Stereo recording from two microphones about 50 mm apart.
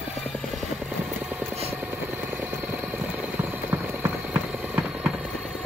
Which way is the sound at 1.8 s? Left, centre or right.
Right.